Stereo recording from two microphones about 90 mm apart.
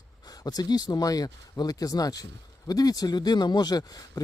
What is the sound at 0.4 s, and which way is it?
Speech, 50° left (ahead or behind).